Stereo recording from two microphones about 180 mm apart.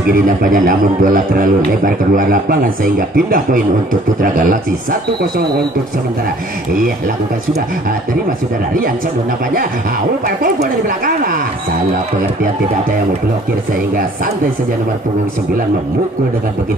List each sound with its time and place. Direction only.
0.4 s a man's voice: 50° right (ahead or behind)
10.2 s a man's voice: 50° right (ahead or behind)